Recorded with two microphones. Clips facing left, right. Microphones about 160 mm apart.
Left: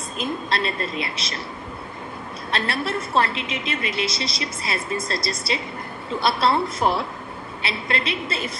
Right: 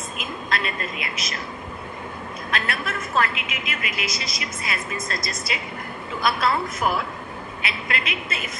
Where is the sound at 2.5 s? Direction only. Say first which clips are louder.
Left 3 dB; 30° left (ahead or behind).